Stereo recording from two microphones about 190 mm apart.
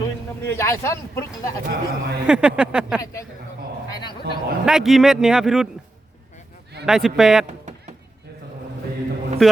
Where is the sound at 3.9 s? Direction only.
25° left (ahead or behind).